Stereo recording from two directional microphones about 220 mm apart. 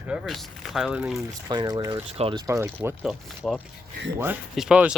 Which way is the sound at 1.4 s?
20° right (ahead or behind).